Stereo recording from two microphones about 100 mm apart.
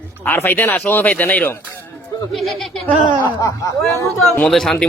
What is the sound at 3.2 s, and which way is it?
Speech, 35° left (ahead or behind).